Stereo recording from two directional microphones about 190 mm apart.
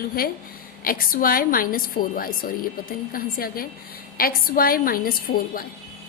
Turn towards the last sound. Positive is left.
turn(degrees=50)  # may be behind; listen again after turning